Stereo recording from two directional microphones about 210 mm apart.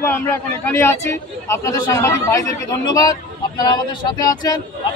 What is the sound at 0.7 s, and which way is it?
A man's voice, 10° left (ahead or behind).